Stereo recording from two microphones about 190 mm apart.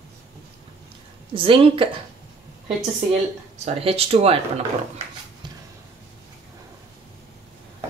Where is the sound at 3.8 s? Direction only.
30° right (ahead or behind).